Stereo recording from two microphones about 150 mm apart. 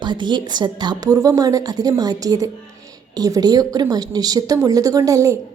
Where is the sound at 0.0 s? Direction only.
30° right (ahead or behind).